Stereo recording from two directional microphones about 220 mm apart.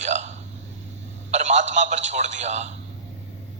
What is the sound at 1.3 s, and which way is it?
A man's voice, 30° right (ahead or behind).